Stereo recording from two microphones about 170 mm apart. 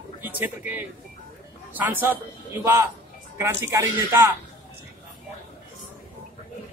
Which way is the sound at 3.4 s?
15° right (ahead or behind).